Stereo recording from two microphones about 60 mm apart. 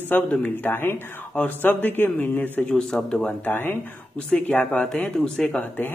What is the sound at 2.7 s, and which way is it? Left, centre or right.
Speech, centre.